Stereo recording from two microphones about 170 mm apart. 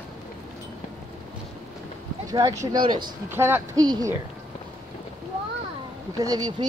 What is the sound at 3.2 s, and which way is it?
Speech, 15° right (ahead or behind).